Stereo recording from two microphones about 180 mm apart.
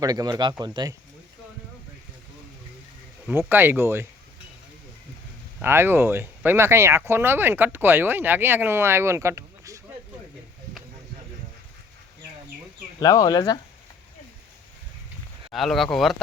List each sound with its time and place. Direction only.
0.0 s speech: 20° right (ahead or behind)
3.2 s speech: 10° right (ahead or behind)
5.6 s speech: 10° right (ahead or behind)
13.0 s speech: 20° left (ahead or behind)
15.5 s speech: centre (ahead or behind)